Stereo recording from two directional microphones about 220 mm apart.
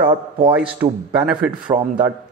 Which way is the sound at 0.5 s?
5° right (ahead or behind).